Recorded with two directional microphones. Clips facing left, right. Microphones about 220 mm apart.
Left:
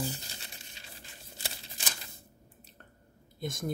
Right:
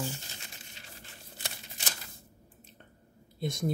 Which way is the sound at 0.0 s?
35° left (ahead or behind).